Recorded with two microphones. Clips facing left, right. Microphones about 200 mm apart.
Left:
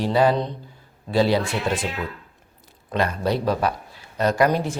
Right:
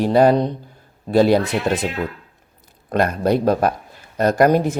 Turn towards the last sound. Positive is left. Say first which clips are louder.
# right 5 dB
turn(degrees=-50)  # may be behind; listen again after turning